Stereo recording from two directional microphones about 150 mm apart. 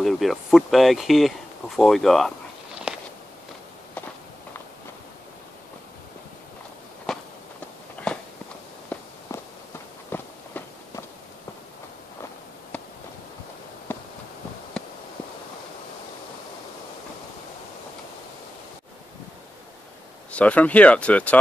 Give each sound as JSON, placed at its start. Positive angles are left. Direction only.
{"t": 0.0, "sound": "speech", "side_deg": 0}
{"t": 2.9, "sound": "a sound", "side_deg": -5}
{"t": 7.1, "sound": "walk", "side_deg": 0}
{"t": 9.3, "sound": "walk", "side_deg": 20}
{"t": 13.9, "sound": "a sound", "side_deg": 10}
{"t": 20.2, "sound": "speech", "side_deg": 10}